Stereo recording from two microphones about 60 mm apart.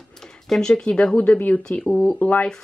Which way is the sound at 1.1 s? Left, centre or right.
Left.